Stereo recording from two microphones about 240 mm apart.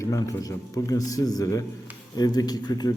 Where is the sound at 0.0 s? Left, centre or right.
Centre.